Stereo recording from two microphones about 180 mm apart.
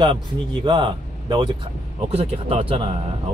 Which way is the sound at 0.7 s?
25° right (ahead or behind).